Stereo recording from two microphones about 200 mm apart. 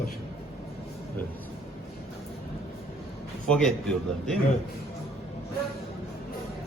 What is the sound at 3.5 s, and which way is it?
Speech, 5° left (ahead or behind).